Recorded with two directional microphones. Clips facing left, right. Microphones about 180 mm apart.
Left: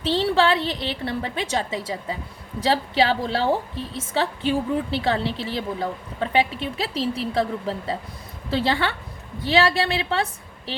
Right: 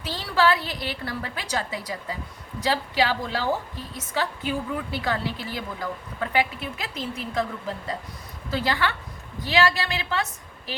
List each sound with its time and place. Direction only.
0.0 s a woman's voice: 25° left (ahead or behind)